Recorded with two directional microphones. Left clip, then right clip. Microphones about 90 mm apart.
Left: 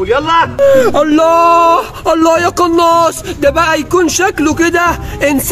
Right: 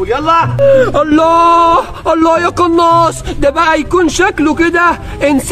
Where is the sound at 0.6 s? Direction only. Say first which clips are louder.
Even; 35° right (ahead or behind).